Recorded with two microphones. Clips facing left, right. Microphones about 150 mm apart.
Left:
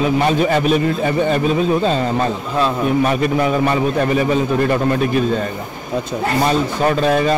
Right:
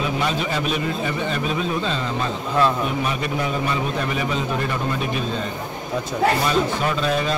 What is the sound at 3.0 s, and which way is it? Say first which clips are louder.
A man's voice: left 8 dB; 55° left (ahead or behind).